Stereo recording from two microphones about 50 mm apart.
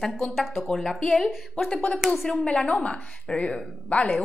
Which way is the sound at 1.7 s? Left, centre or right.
Left.